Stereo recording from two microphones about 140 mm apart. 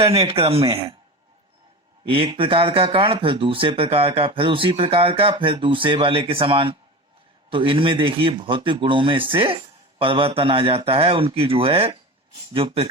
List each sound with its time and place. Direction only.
0.0 s speech: 45° right (ahead or behind)
2.0 s speech: 40° right (ahead or behind)